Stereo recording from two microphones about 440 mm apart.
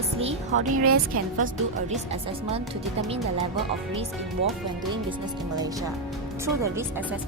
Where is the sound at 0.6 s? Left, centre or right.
Right.